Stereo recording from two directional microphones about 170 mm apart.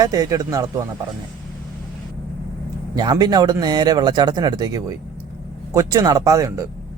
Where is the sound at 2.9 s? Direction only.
25° right (ahead or behind).